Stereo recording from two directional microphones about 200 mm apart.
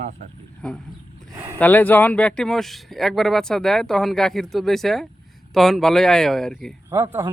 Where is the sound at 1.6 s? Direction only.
10° left (ahead or behind).